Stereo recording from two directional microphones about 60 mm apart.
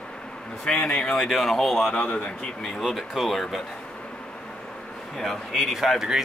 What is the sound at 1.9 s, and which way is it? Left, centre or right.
Speech, centre.